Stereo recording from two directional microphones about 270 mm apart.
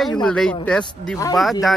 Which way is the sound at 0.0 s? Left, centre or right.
Centre.